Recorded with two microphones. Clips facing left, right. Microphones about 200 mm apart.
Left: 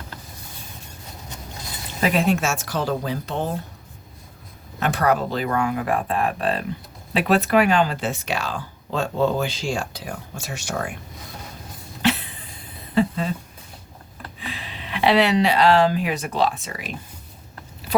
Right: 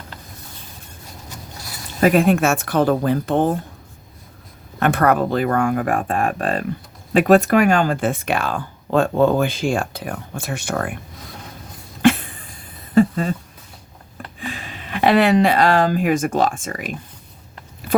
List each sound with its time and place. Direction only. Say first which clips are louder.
2.0 s speech: right 6 dB; 50° right (ahead or behind)
4.8 s speech: right 4 dB; 55° right (ahead or behind)
12.0 s a sound: right 7 dB; 50° right (ahead or behind)
14.3 s speech: right 4 dB; 45° right (ahead or behind)